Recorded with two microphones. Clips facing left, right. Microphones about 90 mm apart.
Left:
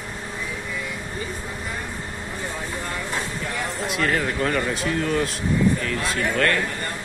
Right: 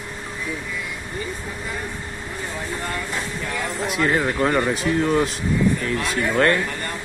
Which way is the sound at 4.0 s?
20° right (ahead or behind).